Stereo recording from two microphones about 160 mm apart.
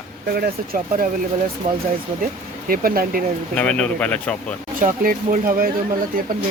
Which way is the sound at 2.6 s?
65° right (ahead or behind).